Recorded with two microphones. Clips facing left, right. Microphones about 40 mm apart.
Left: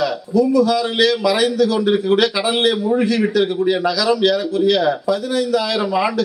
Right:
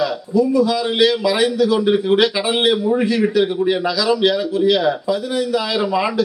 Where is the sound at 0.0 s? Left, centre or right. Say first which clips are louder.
Even; right.